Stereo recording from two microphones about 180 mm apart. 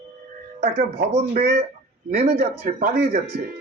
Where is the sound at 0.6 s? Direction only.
55° right (ahead or behind).